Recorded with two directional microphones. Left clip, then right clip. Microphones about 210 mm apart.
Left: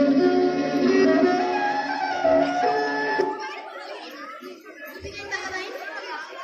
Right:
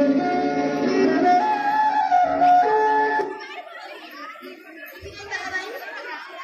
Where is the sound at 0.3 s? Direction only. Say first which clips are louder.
Even; 30° left (ahead or behind).